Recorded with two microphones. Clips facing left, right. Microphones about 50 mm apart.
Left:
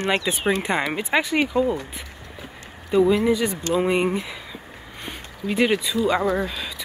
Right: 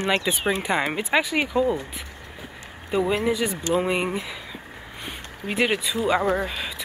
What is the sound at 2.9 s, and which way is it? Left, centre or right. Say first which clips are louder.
Speech: left 5 dB; centre.